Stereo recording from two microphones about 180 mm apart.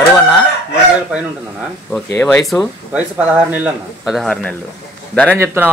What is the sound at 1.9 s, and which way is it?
Speech, 10° left (ahead or behind).